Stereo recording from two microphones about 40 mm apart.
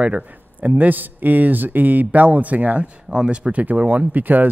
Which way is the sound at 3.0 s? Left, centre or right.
Right.